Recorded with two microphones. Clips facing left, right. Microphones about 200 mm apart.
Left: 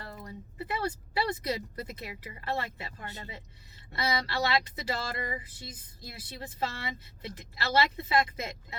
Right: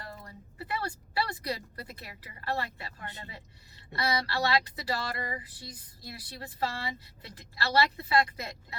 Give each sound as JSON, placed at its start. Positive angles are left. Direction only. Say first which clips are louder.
{"t": 0.3, "sound": "speech", "louder": "left 2 dB", "side_deg": 20}